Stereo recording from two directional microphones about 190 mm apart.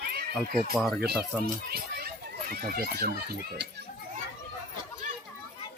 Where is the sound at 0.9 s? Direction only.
60° right (ahead or behind).